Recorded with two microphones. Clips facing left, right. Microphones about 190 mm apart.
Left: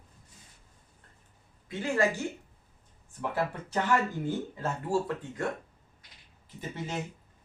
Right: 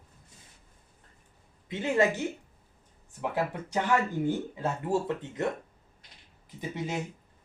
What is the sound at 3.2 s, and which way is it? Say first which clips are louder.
Speech: right 1 dB; 15° right (ahead or behind).